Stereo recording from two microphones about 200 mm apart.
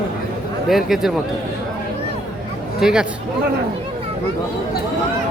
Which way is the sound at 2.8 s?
5° right (ahead or behind).